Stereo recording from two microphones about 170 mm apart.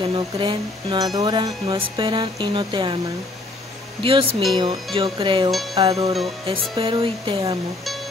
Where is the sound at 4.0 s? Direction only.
30° right (ahead or behind).